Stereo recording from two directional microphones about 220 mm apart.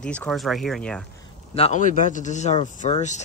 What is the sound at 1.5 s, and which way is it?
Speech, 30° left (ahead or behind).